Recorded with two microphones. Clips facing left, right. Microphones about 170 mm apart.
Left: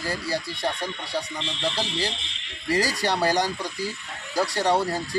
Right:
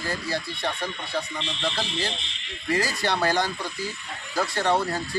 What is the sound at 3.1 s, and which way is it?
Speech, 15° left (ahead or behind).